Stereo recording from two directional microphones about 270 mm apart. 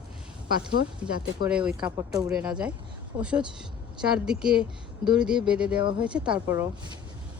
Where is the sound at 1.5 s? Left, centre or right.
Centre.